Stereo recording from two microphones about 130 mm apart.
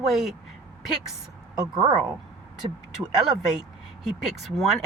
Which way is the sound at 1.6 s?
30° right (ahead or behind).